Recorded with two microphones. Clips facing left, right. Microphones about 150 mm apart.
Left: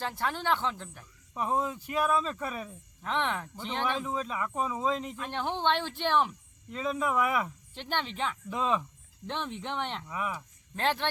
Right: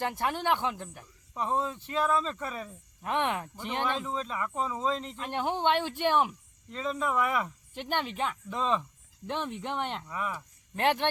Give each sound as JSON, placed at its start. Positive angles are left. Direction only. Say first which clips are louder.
{"t": 0.0, "sound": "speech", "louder": "right 2 dB", "side_deg": -15}
{"t": 1.3, "sound": "speech", "louder": "even", "side_deg": 10}
{"t": 3.0, "sound": "speech", "louder": "right 2 dB", "side_deg": -15}
{"t": 3.8, "sound": "speech", "louder": "left 3 dB", "side_deg": 10}
{"t": 5.2, "sound": "speech", "louder": "right 3 dB", "side_deg": -10}
{"t": 6.7, "sound": "speech", "louder": "left 1 dB", "side_deg": 10}
{"t": 7.7, "sound": "speech", "louder": "right 2 dB", "side_deg": -10}
{"t": 8.5, "sound": "speech", "louder": "even", "side_deg": 5}
{"t": 9.2, "sound": "speech", "louder": "right 2 dB", "side_deg": -10}
{"t": 10.1, "sound": "speech", "louder": "even", "side_deg": 10}
{"t": 10.8, "sound": "speech", "louder": "right 3 dB", "side_deg": -15}